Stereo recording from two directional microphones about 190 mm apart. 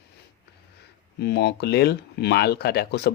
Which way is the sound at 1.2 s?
60° left (ahead or behind).